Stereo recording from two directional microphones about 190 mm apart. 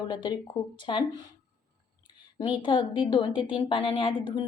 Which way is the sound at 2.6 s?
25° left (ahead or behind).